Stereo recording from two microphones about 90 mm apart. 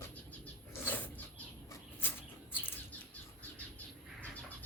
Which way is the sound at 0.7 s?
20° left (ahead or behind).